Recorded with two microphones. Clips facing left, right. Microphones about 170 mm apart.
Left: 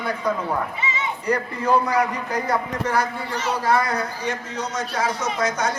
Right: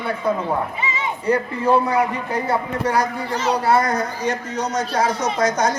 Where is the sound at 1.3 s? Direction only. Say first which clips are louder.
Right 3 dB; 30° right (ahead or behind).